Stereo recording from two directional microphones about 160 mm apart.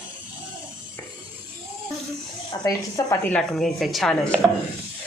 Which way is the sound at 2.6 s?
20° left (ahead or behind).